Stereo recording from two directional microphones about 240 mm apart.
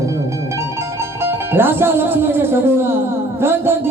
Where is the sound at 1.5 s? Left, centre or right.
Centre.